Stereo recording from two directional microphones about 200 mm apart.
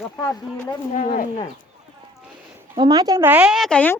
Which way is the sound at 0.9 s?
40° left (ahead or behind).